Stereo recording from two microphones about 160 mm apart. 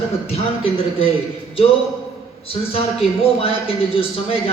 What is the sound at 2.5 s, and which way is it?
Speech, 40° left (ahead or behind).